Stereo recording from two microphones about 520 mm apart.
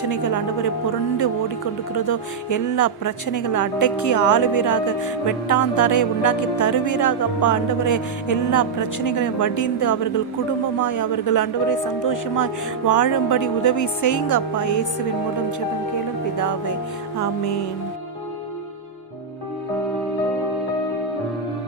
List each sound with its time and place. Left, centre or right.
0.1 s a woman's voice: left
16.4 s a woman's voice: left